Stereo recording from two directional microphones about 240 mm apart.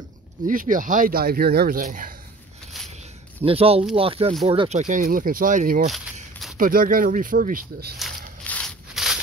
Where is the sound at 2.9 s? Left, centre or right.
Right.